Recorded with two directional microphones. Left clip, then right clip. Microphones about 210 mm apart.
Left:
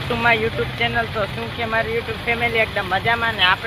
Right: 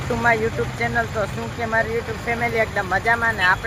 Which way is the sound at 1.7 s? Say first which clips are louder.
Even; centre (ahead or behind).